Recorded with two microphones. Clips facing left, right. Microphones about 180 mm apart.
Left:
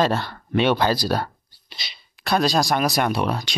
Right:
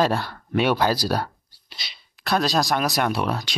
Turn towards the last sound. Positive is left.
turn(degrees=0)  # may be behind; listen again after turning